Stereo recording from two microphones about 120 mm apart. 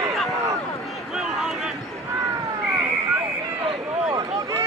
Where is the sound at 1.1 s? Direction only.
5° right (ahead or behind).